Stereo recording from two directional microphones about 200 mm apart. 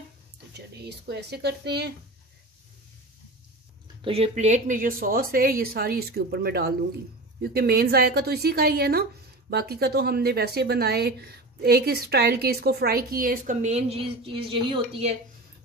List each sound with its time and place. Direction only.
0.5 s speech: 55° right (ahead or behind)
4.0 s speech: 30° right (ahead or behind)